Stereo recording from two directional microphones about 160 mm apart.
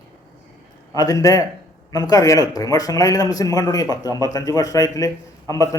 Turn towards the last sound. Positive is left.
turn(degrees=20)  # may be behind; listen again after turning